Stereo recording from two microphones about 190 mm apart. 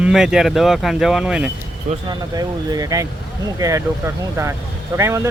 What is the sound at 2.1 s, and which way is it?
Speech, 20° right (ahead or behind).